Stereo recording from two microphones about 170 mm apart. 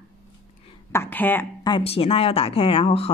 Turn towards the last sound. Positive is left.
turn(degrees=35)  # may be behind; listen again after turning